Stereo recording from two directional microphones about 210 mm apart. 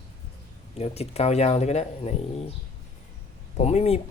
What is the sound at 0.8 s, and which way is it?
Speech, 30° left (ahead or behind).